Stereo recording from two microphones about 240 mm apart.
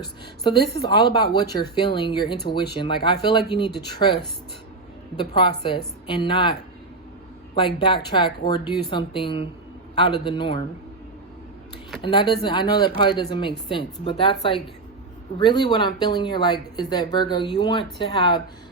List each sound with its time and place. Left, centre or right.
0.9 s speech: centre
5.1 s speech: centre
12.0 s speech: centre
15.4 s speech: centre